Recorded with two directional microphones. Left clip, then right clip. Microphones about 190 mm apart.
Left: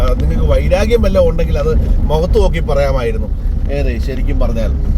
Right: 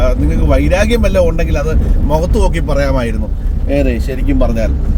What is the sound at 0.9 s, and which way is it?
Speech, 20° right (ahead or behind).